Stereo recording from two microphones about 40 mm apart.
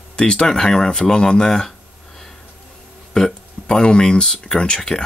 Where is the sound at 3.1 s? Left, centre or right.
Centre.